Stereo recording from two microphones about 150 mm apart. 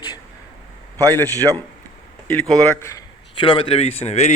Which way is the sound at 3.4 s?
35° left (ahead or behind).